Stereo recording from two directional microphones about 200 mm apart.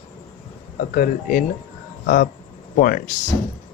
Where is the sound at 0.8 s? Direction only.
45° left (ahead or behind).